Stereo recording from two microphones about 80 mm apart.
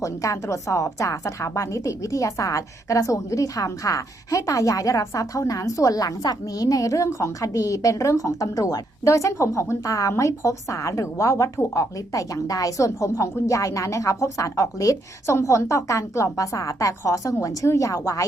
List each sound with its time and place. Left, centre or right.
0.0 s a woman's voice: left